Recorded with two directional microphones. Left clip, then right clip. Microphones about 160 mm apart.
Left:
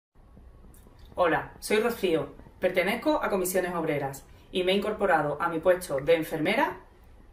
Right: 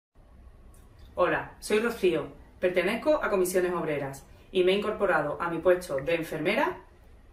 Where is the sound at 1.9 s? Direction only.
15° right (ahead or behind).